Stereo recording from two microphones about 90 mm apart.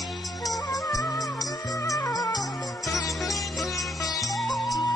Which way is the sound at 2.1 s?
45° left (ahead or behind).